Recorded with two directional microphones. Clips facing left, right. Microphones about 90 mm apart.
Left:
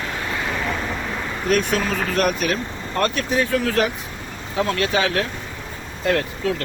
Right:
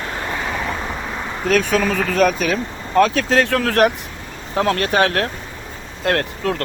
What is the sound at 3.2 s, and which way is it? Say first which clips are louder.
Speech: right 3 dB; 90° right.